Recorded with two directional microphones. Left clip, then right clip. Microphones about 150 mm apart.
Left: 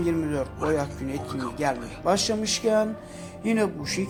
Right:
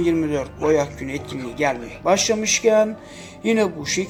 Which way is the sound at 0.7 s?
45° left (ahead or behind).